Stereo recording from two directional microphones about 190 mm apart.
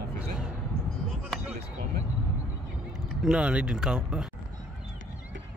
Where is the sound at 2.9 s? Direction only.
5° right (ahead or behind).